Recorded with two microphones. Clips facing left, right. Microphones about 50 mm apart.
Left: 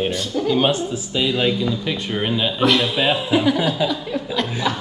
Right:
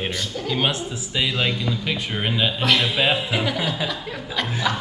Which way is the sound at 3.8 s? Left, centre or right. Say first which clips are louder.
Left 6 dB; centre.